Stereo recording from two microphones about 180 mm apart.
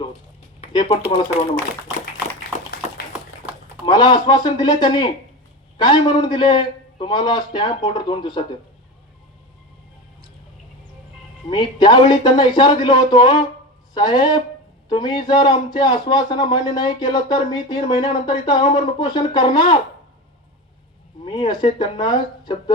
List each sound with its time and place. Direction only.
0.7 s speech: 25° left (ahead or behind)
3.8 s a man's voice: 25° left (ahead or behind)
11.4 s a man's voice: 25° left (ahead or behind)
21.2 s a man's voice: 25° left (ahead or behind)